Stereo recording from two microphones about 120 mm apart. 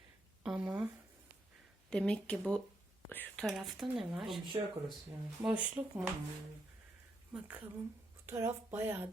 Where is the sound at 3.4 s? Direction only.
Centre (ahead or behind).